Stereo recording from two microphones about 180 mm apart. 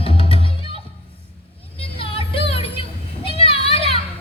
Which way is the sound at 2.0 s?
30° left (ahead or behind).